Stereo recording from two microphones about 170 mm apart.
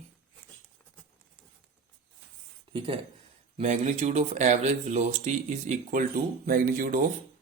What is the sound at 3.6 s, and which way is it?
Speech, 45° right (ahead or behind).